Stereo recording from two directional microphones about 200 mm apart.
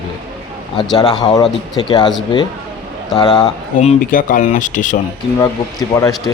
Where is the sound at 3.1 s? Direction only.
25° left (ahead or behind).